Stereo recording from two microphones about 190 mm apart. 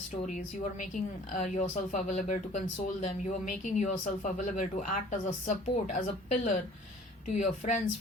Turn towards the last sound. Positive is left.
turn(degrees=40)  # may be behind; listen again after turning